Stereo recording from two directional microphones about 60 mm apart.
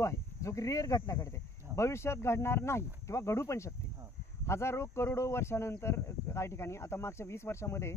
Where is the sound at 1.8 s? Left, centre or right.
Left.